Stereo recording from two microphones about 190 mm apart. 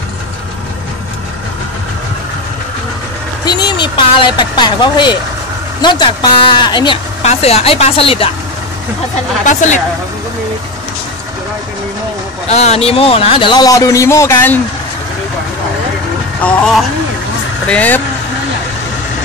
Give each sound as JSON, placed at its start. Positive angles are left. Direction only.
{"t": 3.4, "sound": "a man's voice", "side_deg": 20}
{"t": 9.4, "sound": "a woman's voice", "side_deg": 40}
{"t": 12.4, "sound": "a man's voice", "side_deg": 35}
{"t": 16.3, "sound": "speech", "side_deg": 5}